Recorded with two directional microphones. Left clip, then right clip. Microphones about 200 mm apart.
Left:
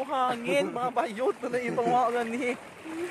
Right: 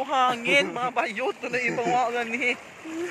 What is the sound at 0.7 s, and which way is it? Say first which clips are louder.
Speech: right 2 dB; 15° left (ahead or behind).